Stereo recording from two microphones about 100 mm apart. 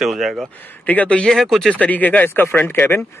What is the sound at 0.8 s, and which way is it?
Speech, 15° left (ahead or behind).